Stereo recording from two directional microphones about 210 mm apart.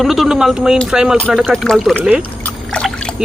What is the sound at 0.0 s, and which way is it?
Speech, centre (ahead or behind).